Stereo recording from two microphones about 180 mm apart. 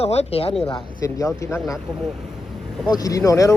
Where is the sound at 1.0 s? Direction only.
15° left (ahead or behind).